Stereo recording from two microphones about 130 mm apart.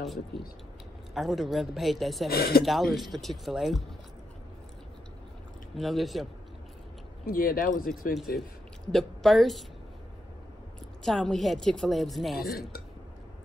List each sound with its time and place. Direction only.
0.0 s a man's voice: centre (ahead or behind)
5.8 s a man's voice: centre (ahead or behind)
7.2 s speech: 90° left
8.9 s a man's voice: centre (ahead or behind)
11.1 s a man's voice: 5° left (ahead or behind)